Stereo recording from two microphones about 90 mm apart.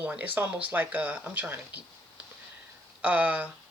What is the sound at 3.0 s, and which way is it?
Speech, 15° right (ahead or behind).